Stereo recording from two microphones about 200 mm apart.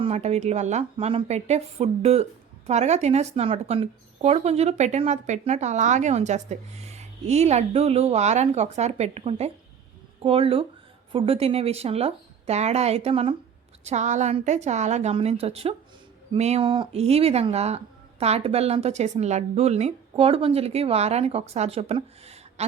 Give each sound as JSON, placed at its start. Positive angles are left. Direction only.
{"t": 0.0, "sound": "speech", "side_deg": -30}